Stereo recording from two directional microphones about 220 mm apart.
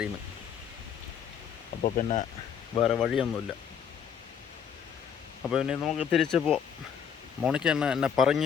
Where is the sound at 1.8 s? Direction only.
30° left (ahead or behind).